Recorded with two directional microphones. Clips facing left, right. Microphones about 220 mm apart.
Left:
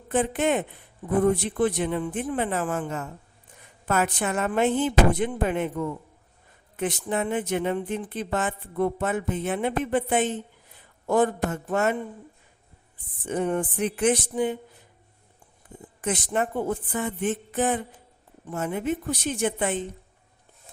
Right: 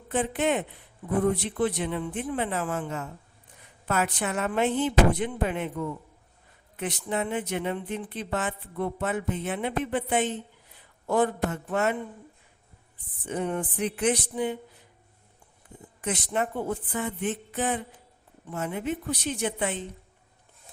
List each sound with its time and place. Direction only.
0.1 s speech: 50° left (ahead or behind)
6.7 s speech: 50° left (ahead or behind)
13.2 s speech: 45° left (ahead or behind)
16.0 s speech: 50° left (ahead or behind)